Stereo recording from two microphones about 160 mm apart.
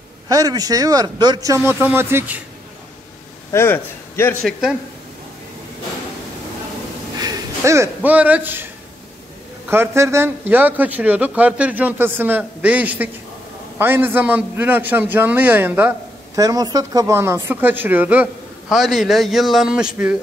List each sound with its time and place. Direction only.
0.3 s speech: 25° right (ahead or behind)
3.5 s a man's voice: 15° left (ahead or behind)
4.5 s a man's voice: 5° right (ahead or behind)
7.2 s a sound: 20° right (ahead or behind)
9.7 s speech: 15° right (ahead or behind)
16.3 s speech: 25° right (ahead or behind); by 20.2 s 5° right (ahead or behind)